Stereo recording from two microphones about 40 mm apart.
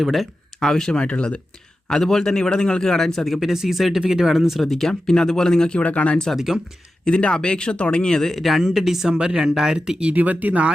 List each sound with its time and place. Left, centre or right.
0.0 s speech: centre
0.6 s speech: centre; by 1.4 s left
1.9 s a man's voice: centre
5.8 s speech: left
6.3 s speech: centre
7.0 s speech: left
8.4 s speech: centre
10.2 s speech: right